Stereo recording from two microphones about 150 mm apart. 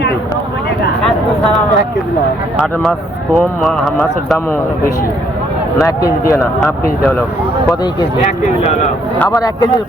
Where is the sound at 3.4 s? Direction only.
5° left (ahead or behind).